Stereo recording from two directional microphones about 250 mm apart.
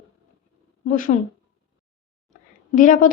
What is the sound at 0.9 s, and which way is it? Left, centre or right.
Speech, left.